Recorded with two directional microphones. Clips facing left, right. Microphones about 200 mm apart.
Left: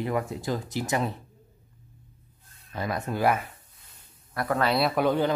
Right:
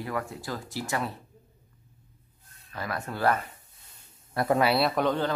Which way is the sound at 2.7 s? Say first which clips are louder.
Left 4 dB; 20° left (ahead or behind).